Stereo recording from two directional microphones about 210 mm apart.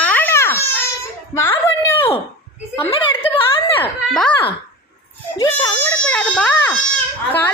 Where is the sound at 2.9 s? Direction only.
25° left (ahead or behind).